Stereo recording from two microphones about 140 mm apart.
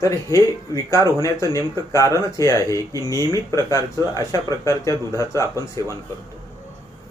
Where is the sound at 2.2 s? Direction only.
20° left (ahead or behind).